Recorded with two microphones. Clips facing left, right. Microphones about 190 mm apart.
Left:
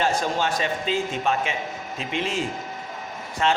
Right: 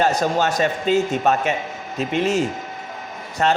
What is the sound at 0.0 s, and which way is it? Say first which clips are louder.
A man's voice: right 5 dB; 40° right (ahead or behind).